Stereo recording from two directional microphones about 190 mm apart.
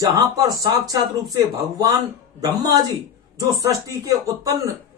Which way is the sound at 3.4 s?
15° right (ahead or behind).